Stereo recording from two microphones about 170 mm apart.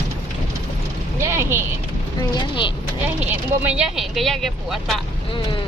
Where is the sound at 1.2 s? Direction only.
15° right (ahead or behind).